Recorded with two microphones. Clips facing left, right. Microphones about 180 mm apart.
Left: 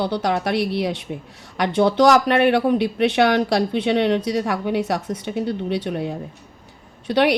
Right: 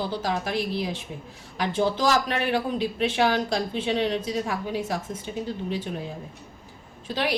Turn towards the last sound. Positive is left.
turn(degrees=70)  # may be behind; listen again after turning